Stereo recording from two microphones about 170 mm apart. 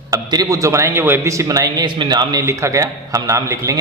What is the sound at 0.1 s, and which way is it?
A man's voice, 20° right (ahead or behind).